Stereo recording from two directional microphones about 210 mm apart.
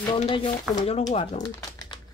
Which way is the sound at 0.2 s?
30° left (ahead or behind).